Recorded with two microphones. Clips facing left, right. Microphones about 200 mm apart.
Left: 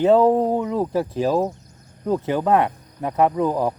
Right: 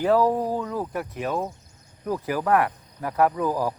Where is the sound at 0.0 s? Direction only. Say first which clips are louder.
Left 5 dB; 25° left (ahead or behind).